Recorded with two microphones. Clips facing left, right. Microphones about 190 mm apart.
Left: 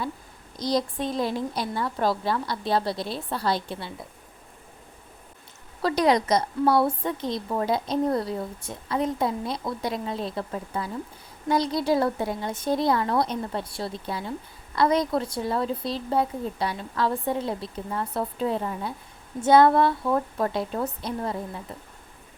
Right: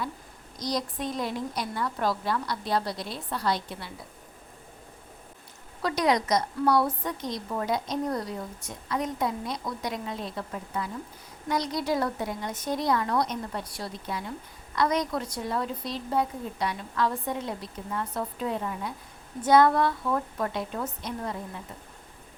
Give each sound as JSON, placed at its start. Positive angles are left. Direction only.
{"t": 0.6, "sound": "a woman's voice", "side_deg": 30}
{"t": 5.8, "sound": "a woman's voice", "side_deg": 30}